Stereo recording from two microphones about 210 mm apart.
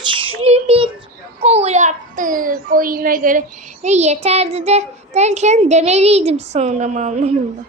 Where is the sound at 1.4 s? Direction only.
30° right (ahead or behind).